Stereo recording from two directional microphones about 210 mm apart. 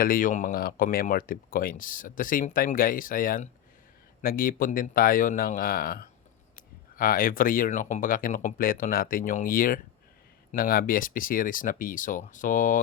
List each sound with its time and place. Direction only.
0.0 s speech: 40° left (ahead or behind)